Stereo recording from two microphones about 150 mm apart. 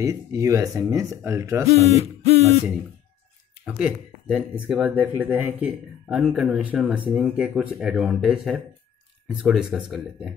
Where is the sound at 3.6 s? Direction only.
5° right (ahead or behind).